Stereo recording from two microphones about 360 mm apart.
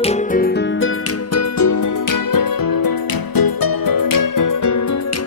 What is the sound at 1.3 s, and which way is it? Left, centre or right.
Music, left.